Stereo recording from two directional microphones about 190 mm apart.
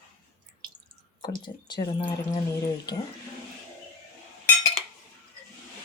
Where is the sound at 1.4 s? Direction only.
25° left (ahead or behind).